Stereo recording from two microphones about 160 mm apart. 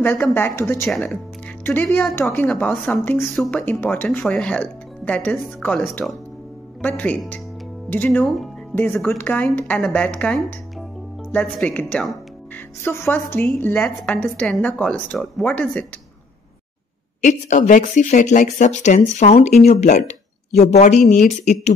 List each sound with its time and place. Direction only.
0.0 s a woman's voice: 10° left (ahead or behind)
0.8 s speech: centre (ahead or behind)
1.6 s a woman's voice: 10° left (ahead or behind)
17.2 s speech: 50° left (ahead or behind)